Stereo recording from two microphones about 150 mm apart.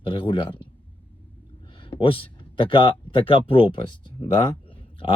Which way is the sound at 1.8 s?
35° left (ahead or behind).